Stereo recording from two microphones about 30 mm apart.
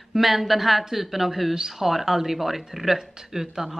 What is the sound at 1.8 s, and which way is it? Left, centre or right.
Speech, centre.